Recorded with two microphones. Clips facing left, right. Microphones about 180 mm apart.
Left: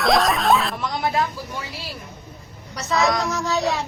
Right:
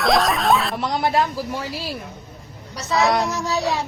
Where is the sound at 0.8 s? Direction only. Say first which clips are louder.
Right 3 dB; 35° right (ahead or behind).